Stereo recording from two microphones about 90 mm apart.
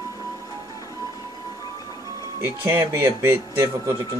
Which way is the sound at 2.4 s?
25° right (ahead or behind).